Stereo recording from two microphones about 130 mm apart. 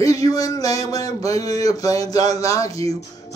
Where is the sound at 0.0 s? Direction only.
25° left (ahead or behind).